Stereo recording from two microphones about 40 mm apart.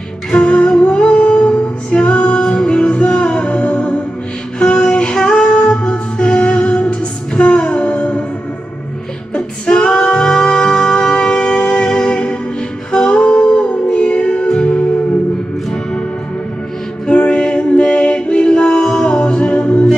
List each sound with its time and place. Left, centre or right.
0.3 s music: left
9.3 s music: left
17.0 s music: left